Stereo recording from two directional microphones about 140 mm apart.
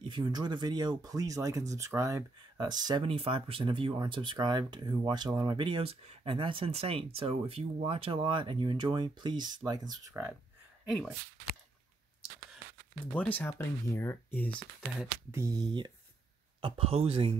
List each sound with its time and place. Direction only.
0.1 s speech: 30° right (ahead or behind)
3.1 s speech: 40° right (ahead or behind)
10.9 s speech: centre (ahead or behind)
13.0 s speech: 10° left (ahead or behind)
15.0 s speech: 20° right (ahead or behind)
16.6 s speech: 40° right (ahead or behind)